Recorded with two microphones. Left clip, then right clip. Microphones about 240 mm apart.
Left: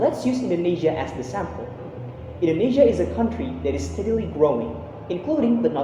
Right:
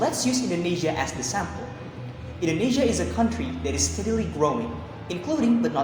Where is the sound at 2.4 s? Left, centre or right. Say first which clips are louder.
Left 6 dB; right.